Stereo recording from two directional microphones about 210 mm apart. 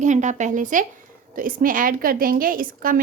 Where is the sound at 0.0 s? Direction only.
35° right (ahead or behind).